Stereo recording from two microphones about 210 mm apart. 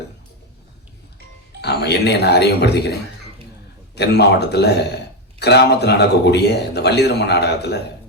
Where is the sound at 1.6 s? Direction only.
50° left (ahead or behind).